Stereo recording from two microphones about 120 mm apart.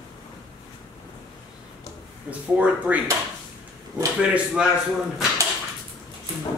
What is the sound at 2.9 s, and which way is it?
Music, 15° right (ahead or behind).